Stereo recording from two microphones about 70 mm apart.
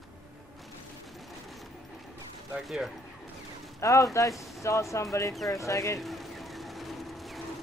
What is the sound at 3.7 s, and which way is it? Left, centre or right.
Speech, left.